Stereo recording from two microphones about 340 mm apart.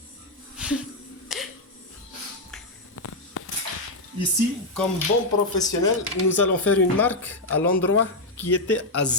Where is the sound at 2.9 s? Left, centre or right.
Left.